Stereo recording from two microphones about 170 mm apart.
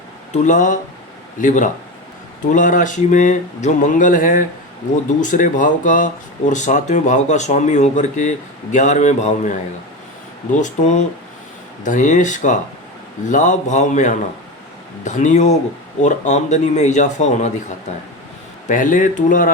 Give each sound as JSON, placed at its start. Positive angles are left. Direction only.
{"t": 0.4, "sound": "speech", "side_deg": 50}
{"t": 10.6, "sound": "speech", "side_deg": 45}